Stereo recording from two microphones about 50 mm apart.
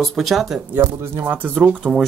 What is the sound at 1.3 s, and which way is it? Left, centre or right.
Speech, right.